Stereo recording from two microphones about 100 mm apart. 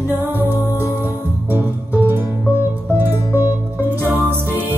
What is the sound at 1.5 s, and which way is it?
Music, 20° right (ahead or behind).